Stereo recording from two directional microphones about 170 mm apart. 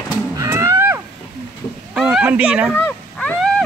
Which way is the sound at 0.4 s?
15° right (ahead or behind).